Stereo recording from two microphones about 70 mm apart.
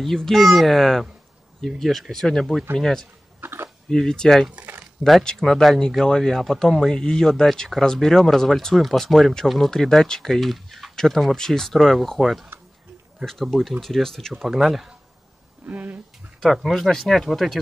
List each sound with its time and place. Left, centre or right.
0.0 s speech: centre
3.3 s a sound: right
3.9 s speech: centre
14.4 s speech: centre
15.6 s speech: right
16.6 s speech: centre